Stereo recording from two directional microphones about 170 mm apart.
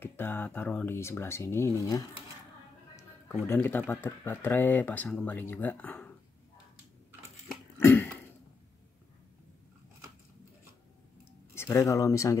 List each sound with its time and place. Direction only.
0.0 s speech: 10° left (ahead or behind)
3.4 s speech: 10° left (ahead or behind)
7.7 s throat clearing: 10° left (ahead or behind)
11.5 s speech: 15° left (ahead or behind)